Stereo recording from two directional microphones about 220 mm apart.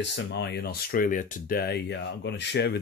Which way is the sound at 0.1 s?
50° left (ahead or behind).